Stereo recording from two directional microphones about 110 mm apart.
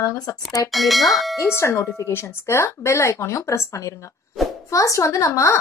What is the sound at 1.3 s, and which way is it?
A woman's voice, 25° left (ahead or behind).